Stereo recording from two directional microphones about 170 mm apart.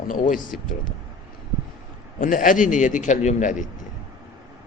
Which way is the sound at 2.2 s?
50° left (ahead or behind).